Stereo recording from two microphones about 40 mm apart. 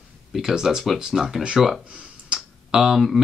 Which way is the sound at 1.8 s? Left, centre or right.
Right.